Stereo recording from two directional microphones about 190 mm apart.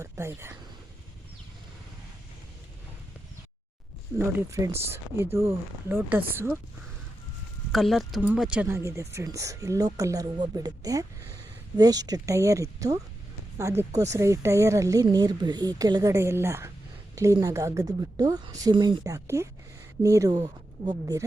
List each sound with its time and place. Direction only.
0.0 s speech: 15° right (ahead or behind)
4.2 s speech: 15° right (ahead or behind)
7.7 s speech: centre (ahead or behind); by 21.2 s 20° right (ahead or behind)